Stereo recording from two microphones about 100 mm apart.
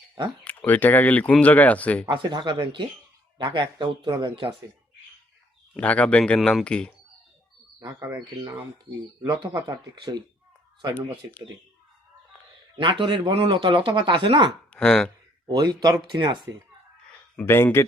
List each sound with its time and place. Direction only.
0.4 s speech: 15° left (ahead or behind)
2.0 s speech: 50° right (ahead or behind)
5.7 s speech: 15° left (ahead or behind)
9.2 s speech: 50° right (ahead or behind)
10.9 s speech: 15° left (ahead or behind)
12.7 s speech: 55° right (ahead or behind)
14.7 s speech: 10° left (ahead or behind)
15.4 s speech: 45° right (ahead or behind)
17.4 s speech: 25° left (ahead or behind)